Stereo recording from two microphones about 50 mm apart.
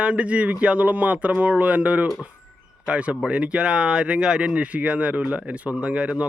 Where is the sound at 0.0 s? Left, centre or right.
Right.